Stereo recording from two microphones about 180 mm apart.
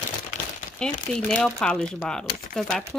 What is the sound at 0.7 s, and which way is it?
Speech, 5° left (ahead or behind).